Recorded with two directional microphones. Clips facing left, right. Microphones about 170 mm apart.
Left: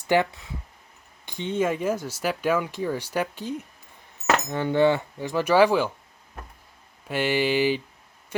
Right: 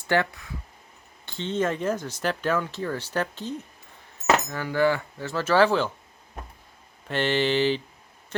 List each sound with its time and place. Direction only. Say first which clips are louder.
0.1 s speech: left 2 dB; 15° left (ahead or behind)
4.4 s speech: left 3 dB; 25° left (ahead or behind)
7.1 s speech: even; 10° left (ahead or behind)